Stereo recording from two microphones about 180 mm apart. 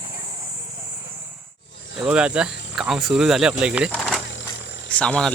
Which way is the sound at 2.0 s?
5° right (ahead or behind).